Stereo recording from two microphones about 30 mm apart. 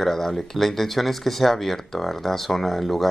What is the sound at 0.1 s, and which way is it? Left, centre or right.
Speech, centre.